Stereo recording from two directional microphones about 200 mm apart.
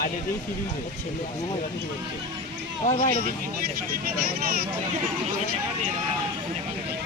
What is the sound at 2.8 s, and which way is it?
Speech, 35° left (ahead or behind).